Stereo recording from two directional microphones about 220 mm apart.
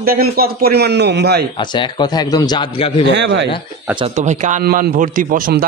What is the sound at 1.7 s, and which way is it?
A man's voice, 20° left (ahead or behind).